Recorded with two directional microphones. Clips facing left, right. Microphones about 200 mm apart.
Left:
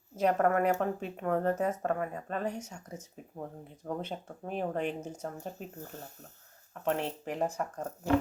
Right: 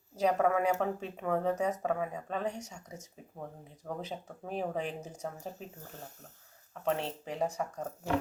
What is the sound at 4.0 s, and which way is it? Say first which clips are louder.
Speech: left 2 dB; centre (ahead or behind).